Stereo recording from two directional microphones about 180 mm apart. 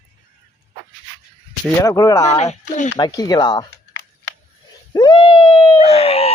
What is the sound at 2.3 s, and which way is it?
Speech, 40° left (ahead or behind).